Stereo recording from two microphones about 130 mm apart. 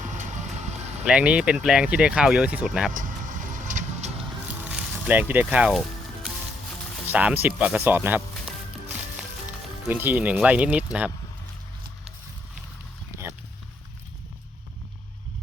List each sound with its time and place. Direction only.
0.0 s vehicle: 70° right (ahead or behind)
1.0 s speech: 10° right (ahead or behind)
2.9 s vehicle: 85° right; by 4.1 s 65° right (ahead or behind)
4.2 s music: 10° right (ahead or behind)
7.1 s speech: 10° right (ahead or behind)
9.9 s speech: 15° right (ahead or behind)